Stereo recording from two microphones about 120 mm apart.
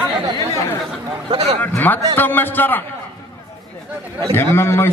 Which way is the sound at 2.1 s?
15° left (ahead or behind).